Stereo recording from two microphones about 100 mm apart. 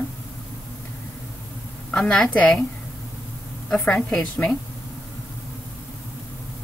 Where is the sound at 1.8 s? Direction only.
5° left (ahead or behind).